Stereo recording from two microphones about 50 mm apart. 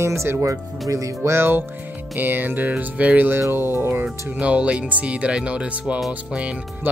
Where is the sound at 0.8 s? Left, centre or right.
Right.